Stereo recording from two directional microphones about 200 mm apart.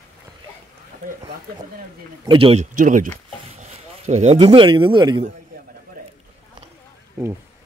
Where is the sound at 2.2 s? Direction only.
25° right (ahead or behind).